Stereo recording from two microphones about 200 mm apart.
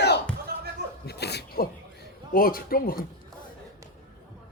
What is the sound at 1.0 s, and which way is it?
Sneeze, 55° left (ahead or behind).